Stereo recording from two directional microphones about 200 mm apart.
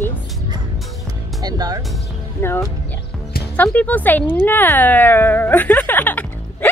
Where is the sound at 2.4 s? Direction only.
10° left (ahead or behind).